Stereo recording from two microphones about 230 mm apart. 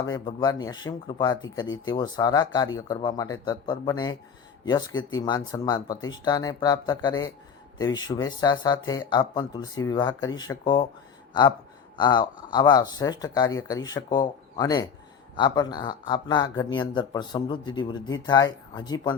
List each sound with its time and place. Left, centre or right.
0.0 s speech: centre
1.6 s speech: left
1.9 s speech: centre
11.9 s speech: centre